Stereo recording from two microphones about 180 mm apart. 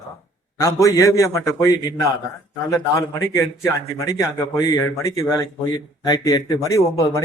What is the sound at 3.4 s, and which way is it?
A man's voice, 15° left (ahead or behind).